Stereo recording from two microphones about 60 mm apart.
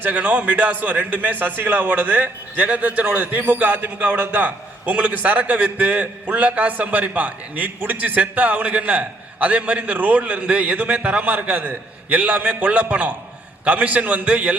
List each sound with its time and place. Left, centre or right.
0.0 s a man's voice: right